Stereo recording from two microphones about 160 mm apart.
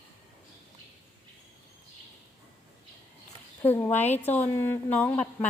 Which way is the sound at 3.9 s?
45° left (ahead or behind).